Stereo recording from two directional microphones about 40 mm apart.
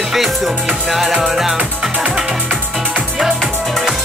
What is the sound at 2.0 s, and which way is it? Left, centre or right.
Music, centre.